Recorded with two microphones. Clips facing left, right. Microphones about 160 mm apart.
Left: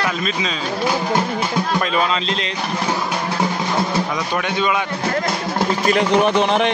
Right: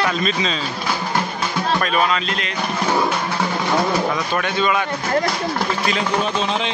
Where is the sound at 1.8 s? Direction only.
25° left (ahead or behind).